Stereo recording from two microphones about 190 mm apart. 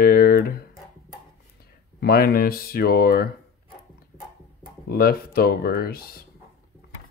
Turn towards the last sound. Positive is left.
turn(degrees=55)  # may be behind; listen again after turning